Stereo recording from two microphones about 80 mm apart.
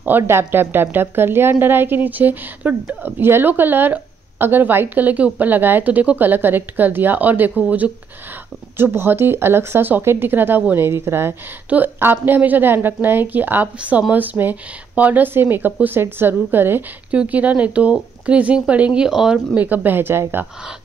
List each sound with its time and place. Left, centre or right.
0.2 s a woman's voice: right